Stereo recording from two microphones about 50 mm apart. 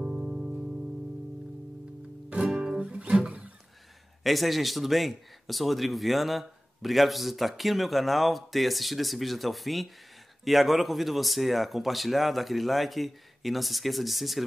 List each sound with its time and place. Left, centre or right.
0.0 s music: centre
2.2 s music: centre
4.2 s speech: centre